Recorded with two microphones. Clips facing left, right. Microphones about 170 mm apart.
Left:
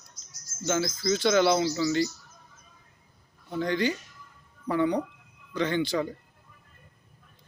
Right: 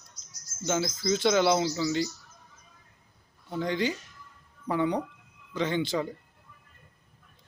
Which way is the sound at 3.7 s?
20° right (ahead or behind).